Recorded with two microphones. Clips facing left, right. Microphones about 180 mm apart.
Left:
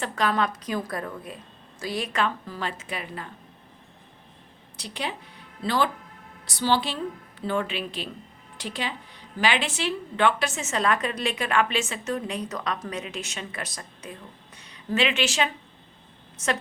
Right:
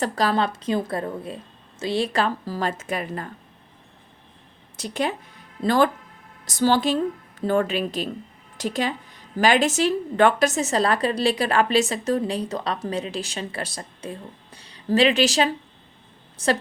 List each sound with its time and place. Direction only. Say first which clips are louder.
0.0 s a woman's voice: right 3 dB; 35° right (ahead or behind)
4.8 s a woman's voice: right 7 dB; 45° right (ahead or behind)